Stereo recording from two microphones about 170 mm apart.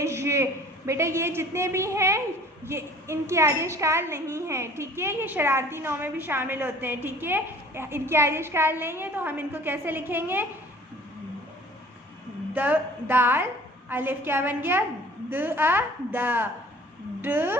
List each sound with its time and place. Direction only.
0.0 s a sound: 15° right (ahead or behind)
0.9 s a woman's voice: 15° right (ahead or behind)
12.5 s a woman's voice: 10° right (ahead or behind)